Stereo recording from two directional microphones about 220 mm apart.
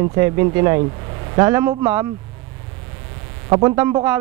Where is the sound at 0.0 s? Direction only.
15° right (ahead or behind).